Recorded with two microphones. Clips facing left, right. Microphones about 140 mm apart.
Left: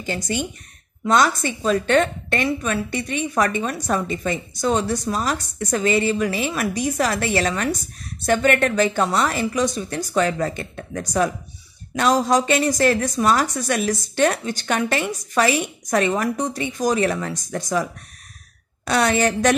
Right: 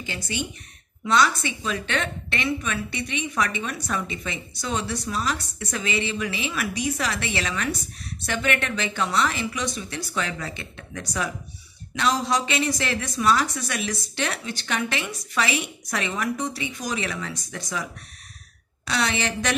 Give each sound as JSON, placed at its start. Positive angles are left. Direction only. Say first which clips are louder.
{"t": 1.0, "sound": "a woman's voice", "louder": "left 3 dB", "side_deg": 45}
{"t": 18.9, "sound": "a woman's voice", "louder": "left 7 dB", "side_deg": 45}